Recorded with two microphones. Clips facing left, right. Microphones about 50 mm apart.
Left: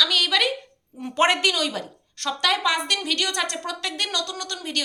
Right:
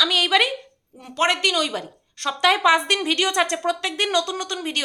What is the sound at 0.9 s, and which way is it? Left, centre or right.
A woman's voice, centre.